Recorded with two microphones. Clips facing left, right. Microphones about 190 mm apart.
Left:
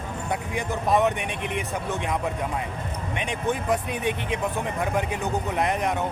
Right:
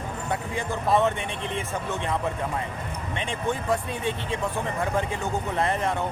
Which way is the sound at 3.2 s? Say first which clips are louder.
Left 1 dB; 15° left (ahead or behind).